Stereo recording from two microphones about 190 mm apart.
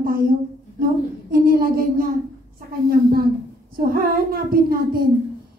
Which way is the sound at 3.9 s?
55° right (ahead or behind).